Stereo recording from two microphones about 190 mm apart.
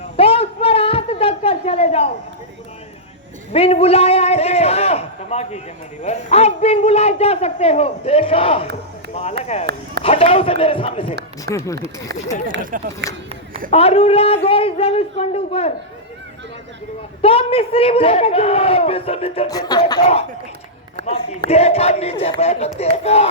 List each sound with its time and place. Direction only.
0.2 s a sound: 30° left (ahead or behind)
3.5 s a man's voice: 30° left (ahead or behind)
11.4 s speech: 15° left (ahead or behind)
12.7 s speech: 45° right (ahead or behind)
13.7 s a man's voice: 30° left (ahead or behind)
17.2 s a man's voice: 30° left (ahead or behind)
19.5 s a man's voice: 20° left (ahead or behind)
21.5 s a man's voice: 35° left (ahead or behind)